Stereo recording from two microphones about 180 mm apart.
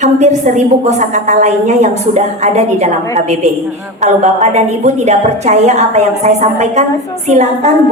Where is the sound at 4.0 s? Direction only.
40° right (ahead or behind).